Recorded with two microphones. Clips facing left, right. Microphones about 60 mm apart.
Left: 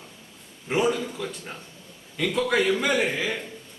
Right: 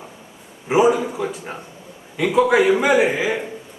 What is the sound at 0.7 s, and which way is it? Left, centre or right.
A man's voice, centre.